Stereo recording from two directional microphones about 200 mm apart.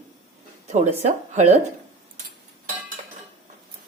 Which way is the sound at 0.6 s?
35° right (ahead or behind).